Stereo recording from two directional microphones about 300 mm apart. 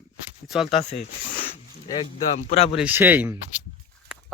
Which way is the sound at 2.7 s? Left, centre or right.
Centre.